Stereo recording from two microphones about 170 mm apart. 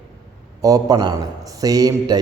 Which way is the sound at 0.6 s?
20° right (ahead or behind).